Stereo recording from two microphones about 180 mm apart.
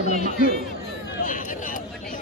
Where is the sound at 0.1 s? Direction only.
40° left (ahead or behind).